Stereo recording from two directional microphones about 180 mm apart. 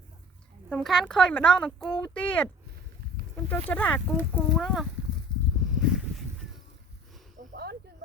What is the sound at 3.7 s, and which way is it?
Speech, 10° left (ahead or behind).